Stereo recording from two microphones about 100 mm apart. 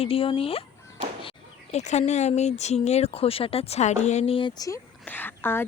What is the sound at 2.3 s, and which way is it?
A woman's voice, 90° left.